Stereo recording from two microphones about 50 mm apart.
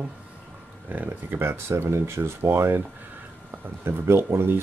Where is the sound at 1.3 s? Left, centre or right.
Right.